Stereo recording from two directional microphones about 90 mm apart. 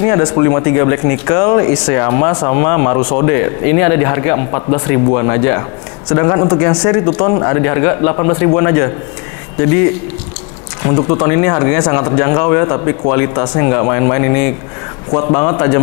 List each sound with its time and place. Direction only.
0.0 s speech: 25° left (ahead or behind)